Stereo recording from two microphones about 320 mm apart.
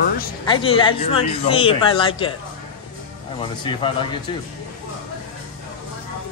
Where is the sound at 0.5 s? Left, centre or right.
Centre.